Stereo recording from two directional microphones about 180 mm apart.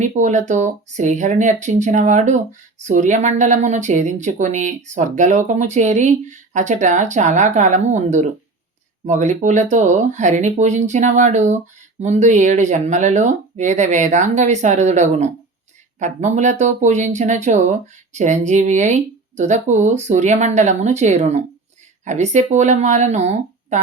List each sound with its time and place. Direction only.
0.0 s speech: 40° right (ahead or behind)